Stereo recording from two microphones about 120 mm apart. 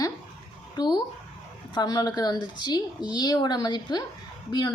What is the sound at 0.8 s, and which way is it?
Speech, 35° left (ahead or behind).